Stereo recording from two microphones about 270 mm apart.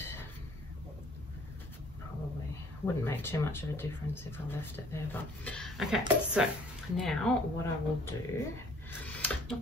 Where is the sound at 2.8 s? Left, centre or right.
Centre.